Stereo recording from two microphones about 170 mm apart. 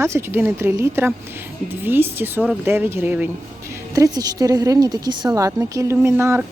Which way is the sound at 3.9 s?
20° right (ahead or behind).